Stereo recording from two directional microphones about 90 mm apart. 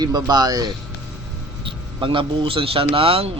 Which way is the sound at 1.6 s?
70° right (ahead or behind).